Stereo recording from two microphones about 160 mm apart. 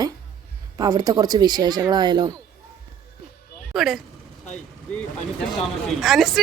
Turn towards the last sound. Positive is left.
turn(degrees=0)  # may be behind; listen again after turning